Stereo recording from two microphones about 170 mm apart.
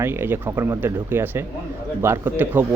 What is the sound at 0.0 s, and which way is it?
Speech, 15° right (ahead or behind).